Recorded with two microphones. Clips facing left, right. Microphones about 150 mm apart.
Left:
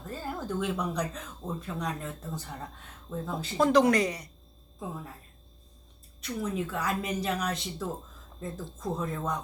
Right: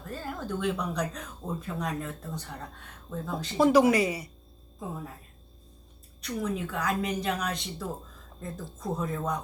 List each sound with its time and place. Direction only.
0.1 s a woman's voice: 10° left (ahead or behind)
6.2 s a woman's voice: 5° left (ahead or behind)